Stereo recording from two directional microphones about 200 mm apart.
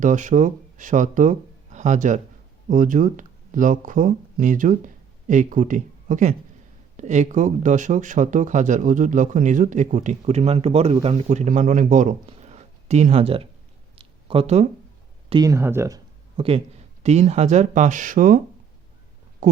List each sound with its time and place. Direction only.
0.0 s speech: 40° right (ahead or behind)
13.9 s a sound: 30° right (ahead or behind)
15.3 s speech: 20° right (ahead or behind)
16.4 s speech: 30° right (ahead or behind)